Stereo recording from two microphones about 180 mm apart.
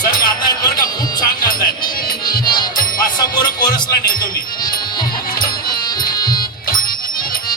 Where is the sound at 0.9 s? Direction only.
25° left (ahead or behind).